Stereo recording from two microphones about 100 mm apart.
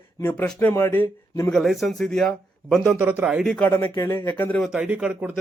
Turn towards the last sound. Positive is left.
turn(degrees=-15)  # may be behind; listen again after turning